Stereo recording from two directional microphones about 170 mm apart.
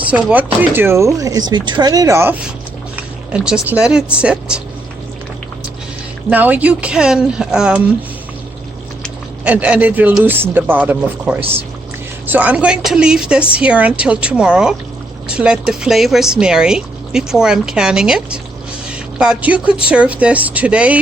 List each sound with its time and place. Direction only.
0.0 s speech: 10° right (ahead or behind)
2.9 s speech: 5° right (ahead or behind)
6.3 s speech: 10° right (ahead or behind)
9.4 s speech: 10° right (ahead or behind)